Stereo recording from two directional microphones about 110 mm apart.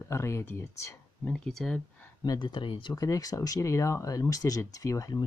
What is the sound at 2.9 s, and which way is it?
Speech, 35° left (ahead or behind).